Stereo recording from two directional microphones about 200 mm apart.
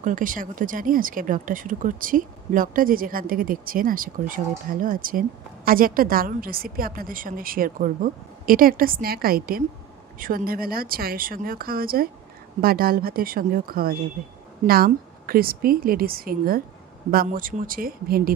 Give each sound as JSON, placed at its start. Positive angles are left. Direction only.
{"t": 0.0, "sound": "speech", "side_deg": -40}